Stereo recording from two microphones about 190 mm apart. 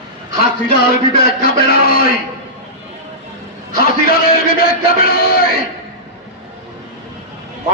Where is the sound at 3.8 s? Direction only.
50° left (ahead or behind).